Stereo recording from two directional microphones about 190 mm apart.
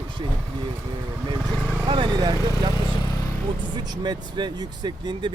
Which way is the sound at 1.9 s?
25° right (ahead or behind).